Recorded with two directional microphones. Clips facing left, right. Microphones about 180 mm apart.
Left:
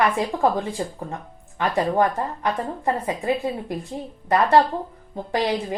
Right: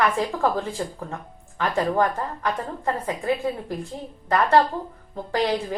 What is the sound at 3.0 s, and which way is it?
Speech, 20° left (ahead or behind).